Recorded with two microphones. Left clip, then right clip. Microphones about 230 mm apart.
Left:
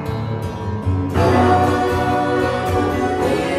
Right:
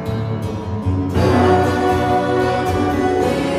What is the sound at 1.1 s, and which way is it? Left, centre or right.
Music, left.